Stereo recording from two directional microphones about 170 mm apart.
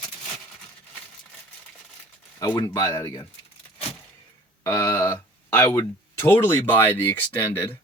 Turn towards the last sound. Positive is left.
turn(degrees=15)  # may be behind; listen again after turning